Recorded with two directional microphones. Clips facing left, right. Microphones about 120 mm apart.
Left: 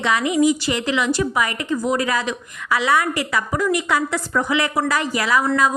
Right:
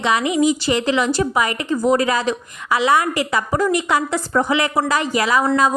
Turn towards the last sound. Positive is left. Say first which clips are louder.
# right 2 dB
turn(degrees=-25)  # may be behind; listen again after turning